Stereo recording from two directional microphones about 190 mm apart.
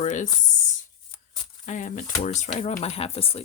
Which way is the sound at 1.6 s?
40° left (ahead or behind).